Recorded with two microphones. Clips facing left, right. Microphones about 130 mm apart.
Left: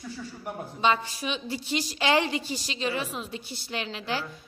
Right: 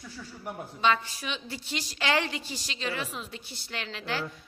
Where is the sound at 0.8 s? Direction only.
20° left (ahead or behind).